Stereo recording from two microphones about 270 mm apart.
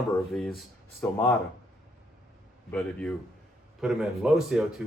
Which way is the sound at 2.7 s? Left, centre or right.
Centre.